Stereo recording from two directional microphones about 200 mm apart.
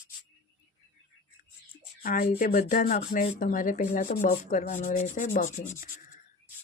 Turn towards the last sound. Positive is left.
turn(degrees=45)  # may be behind; listen again after turning